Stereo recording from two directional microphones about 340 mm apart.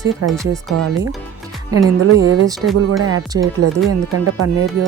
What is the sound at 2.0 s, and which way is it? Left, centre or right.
A woman's voice, right.